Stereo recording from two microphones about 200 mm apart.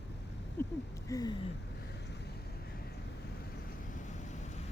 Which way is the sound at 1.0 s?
20° left (ahead or behind).